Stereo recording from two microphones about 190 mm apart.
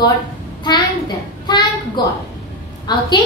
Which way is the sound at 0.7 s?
25° left (ahead or behind).